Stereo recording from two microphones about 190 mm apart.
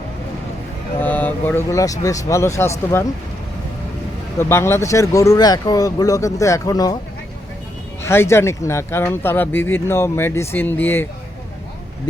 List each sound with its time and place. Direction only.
0.9 s speech: 10° left (ahead or behind)
4.4 s speech: 15° left (ahead or behind)
8.0 s speech: 15° left (ahead or behind)